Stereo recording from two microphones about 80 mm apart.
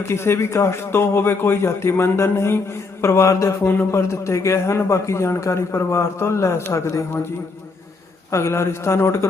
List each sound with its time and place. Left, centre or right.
0.0 s a man's voice: left
8.3 s a man's voice: left